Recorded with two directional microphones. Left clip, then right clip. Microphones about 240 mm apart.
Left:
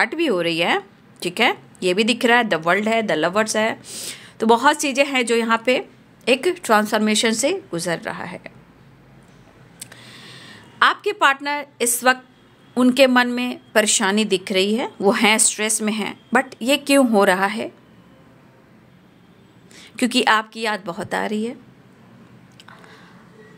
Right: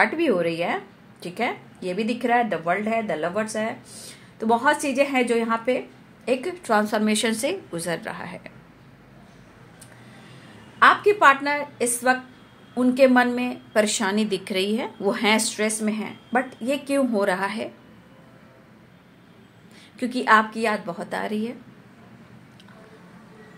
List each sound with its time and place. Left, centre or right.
0.0 s speech: left
10.8 s speech: left
19.8 s speech: left